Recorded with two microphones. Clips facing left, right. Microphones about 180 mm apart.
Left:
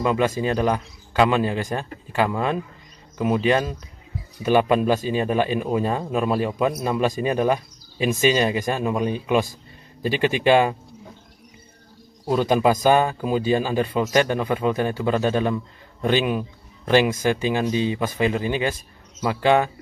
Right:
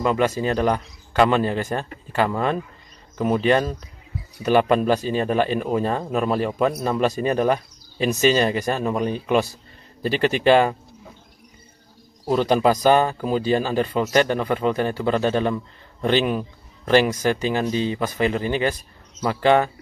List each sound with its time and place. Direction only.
0.4 s speech: 15° left (ahead or behind)
12.3 s speech: 10° left (ahead or behind)